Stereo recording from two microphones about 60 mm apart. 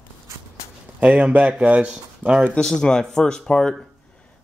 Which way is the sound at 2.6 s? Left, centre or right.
Centre.